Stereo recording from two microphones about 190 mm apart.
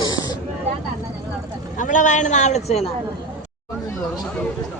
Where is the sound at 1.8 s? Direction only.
40° left (ahead or behind).